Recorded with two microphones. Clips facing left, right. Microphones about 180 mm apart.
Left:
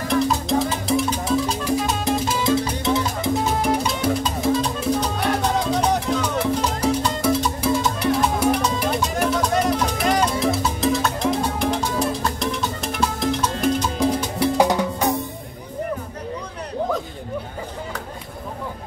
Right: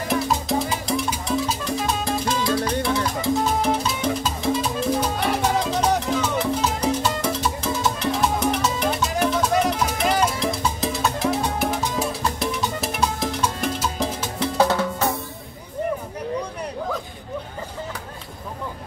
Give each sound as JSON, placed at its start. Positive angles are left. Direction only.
{"t": 0.1, "sound": "music", "side_deg": -5}
{"t": 2.4, "sound": "music", "side_deg": 20}
{"t": 4.2, "sound": "music", "side_deg": -5}
{"t": 6.3, "sound": "music", "side_deg": 10}
{"t": 14.4, "sound": "music", "side_deg": 15}